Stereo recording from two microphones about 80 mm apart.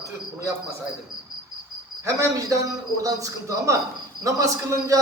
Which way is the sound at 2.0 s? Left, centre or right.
Right.